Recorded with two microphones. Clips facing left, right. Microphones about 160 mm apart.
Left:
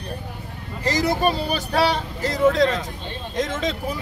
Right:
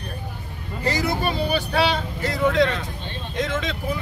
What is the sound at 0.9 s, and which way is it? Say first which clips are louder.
Speech: left 3 dB; 40° left (ahead or behind).